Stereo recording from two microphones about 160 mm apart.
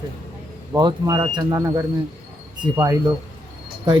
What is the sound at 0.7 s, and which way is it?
Speech, 25° right (ahead or behind).